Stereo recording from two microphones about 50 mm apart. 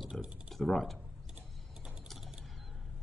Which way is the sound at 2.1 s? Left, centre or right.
Centre.